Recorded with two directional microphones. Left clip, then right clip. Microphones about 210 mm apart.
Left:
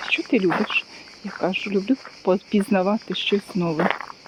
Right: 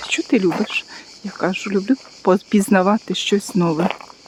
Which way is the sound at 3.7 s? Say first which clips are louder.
Right 1 dB; 10° left (ahead or behind).